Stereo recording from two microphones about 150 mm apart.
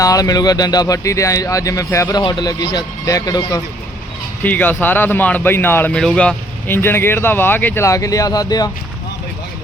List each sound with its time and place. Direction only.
0.0 s speech: 25° left (ahead or behind)
4.4 s speech: 10° left (ahead or behind)